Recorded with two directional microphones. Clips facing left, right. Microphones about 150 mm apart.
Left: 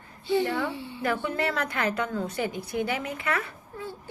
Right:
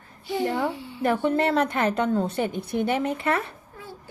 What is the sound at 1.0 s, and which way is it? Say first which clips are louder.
A woman's voice: right 6 dB; 30° right (ahead or behind).